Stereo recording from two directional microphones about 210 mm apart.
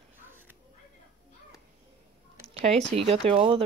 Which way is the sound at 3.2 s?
25° right (ahead or behind).